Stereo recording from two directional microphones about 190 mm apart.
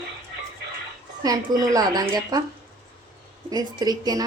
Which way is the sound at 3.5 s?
20° right (ahead or behind).